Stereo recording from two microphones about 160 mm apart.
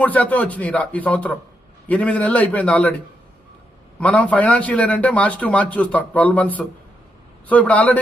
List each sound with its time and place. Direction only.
0.0 s a man's voice: 10° left (ahead or behind)
4.0 s a man's voice: 10° left (ahead or behind)